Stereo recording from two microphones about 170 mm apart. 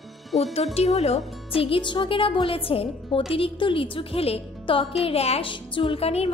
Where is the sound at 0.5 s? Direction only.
40° left (ahead or behind).